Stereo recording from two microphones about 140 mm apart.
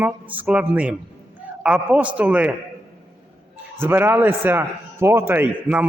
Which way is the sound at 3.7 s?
15° right (ahead or behind).